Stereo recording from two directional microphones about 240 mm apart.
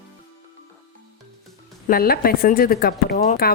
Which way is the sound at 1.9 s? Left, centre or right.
Left.